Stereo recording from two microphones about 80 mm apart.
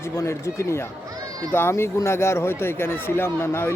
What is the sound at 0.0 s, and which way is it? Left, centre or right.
A man's voice, left.